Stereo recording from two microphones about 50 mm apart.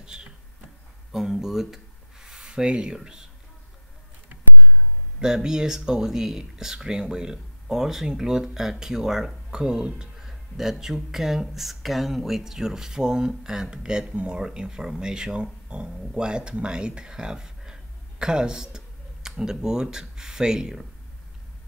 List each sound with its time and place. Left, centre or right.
0.0 s a sound: centre
1.1 s speech: centre
5.2 s speech: centre